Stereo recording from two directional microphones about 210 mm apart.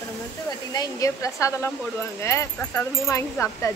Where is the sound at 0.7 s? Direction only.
15° left (ahead or behind).